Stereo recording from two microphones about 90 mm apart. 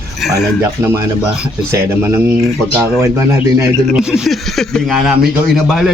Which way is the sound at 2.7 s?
30° right (ahead or behind).